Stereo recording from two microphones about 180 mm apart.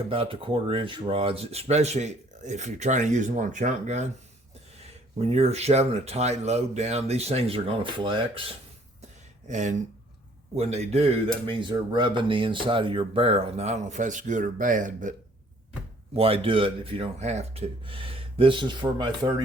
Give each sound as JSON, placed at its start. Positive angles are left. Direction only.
{"t": 0.1, "sound": "speech", "side_deg": -30}
{"t": 5.3, "sound": "speech", "side_deg": -35}
{"t": 9.5, "sound": "speech", "side_deg": -40}
{"t": 16.1, "sound": "speech", "side_deg": -30}